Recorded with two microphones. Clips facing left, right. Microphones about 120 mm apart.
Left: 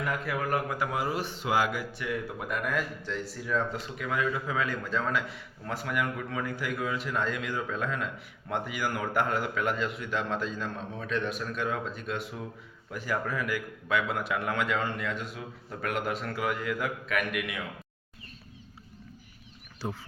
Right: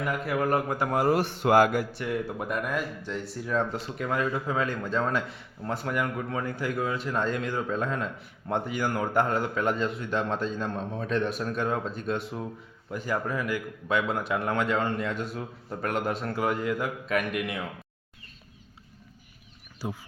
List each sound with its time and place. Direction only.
0.3 s a man's voice: 35° right (ahead or behind)
0.9 s a man's voice: 50° right (ahead or behind)
1.9 s a man's voice: 35° right (ahead or behind)
2.6 s speech: 15° right (ahead or behind)
3.4 s a man's voice: 35° right (ahead or behind)